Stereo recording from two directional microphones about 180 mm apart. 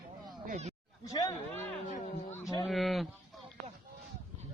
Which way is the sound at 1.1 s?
20° left (ahead or behind).